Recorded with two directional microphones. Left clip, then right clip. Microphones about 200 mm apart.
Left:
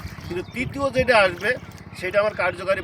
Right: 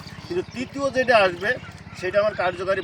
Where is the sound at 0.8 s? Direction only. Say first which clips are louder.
Even; 20° left (ahead or behind).